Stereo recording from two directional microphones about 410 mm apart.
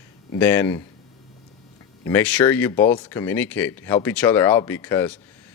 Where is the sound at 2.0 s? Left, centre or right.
Centre.